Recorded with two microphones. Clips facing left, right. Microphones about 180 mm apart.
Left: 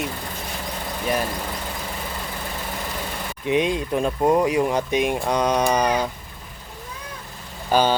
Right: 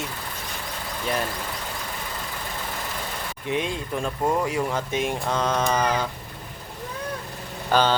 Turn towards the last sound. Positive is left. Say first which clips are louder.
# left 2 dB
turn(degrees=10)  # may be behind; listen again after turning